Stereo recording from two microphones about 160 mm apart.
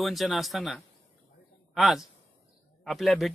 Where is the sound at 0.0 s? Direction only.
Centre (ahead or behind).